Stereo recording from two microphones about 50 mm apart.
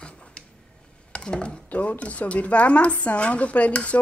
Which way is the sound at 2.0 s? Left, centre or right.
Left.